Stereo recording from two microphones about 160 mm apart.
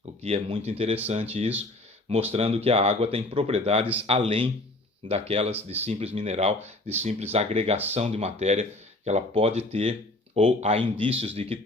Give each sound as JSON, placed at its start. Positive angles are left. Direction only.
{"t": 0.2, "sound": "speech", "side_deg": -40}